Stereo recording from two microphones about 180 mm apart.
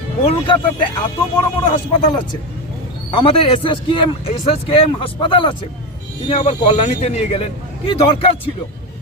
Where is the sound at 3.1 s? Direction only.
30° left (ahead or behind).